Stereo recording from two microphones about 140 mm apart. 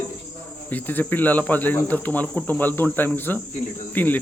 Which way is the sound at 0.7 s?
10° left (ahead or behind).